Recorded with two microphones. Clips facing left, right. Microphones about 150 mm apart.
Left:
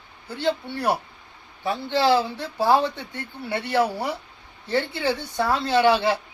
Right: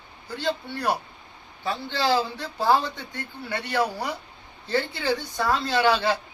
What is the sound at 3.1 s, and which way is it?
Speech, 25° left (ahead or behind).